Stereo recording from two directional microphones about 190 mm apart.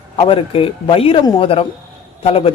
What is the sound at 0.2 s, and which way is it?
A man's voice, 30° left (ahead or behind).